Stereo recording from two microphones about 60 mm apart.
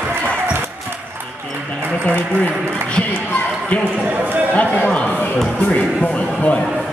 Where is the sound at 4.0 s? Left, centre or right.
Right.